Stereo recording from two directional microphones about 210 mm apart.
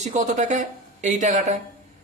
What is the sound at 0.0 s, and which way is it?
Speech, 35° right (ahead or behind).